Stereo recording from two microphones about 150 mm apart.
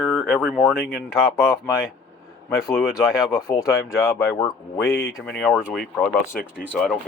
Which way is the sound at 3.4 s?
20° left (ahead or behind).